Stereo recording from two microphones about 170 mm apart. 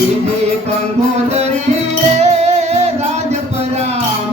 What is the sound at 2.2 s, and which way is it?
Music, 40° right (ahead or behind).